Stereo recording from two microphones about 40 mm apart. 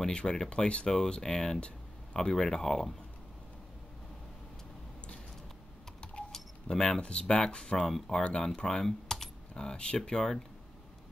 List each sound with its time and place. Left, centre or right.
0.0 s speech: centre
6.7 s speech: left
7.8 s speech: centre
8.2 s speech: left